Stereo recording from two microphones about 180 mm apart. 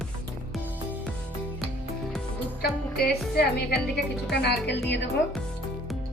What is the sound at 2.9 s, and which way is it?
A woman's voice, 60° left (ahead or behind).